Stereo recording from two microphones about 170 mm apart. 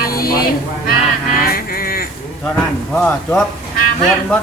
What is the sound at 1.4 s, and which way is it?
Music, 60° left (ahead or behind).